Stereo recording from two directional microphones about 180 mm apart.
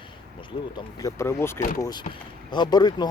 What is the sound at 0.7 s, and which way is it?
Speech, 20° left (ahead or behind).